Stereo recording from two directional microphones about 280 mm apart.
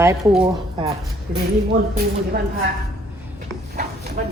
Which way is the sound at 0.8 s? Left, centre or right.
Centre.